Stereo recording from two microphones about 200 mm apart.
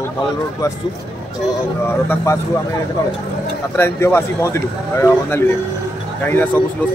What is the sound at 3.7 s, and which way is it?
Speech, 10° left (ahead or behind).